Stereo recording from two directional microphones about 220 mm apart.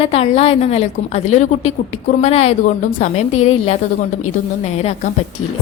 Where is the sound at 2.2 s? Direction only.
30° left (ahead or behind).